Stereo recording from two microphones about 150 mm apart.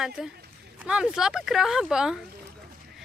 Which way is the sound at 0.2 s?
Centre (ahead or behind).